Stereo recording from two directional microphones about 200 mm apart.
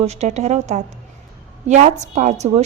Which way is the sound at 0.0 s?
35° right (ahead or behind).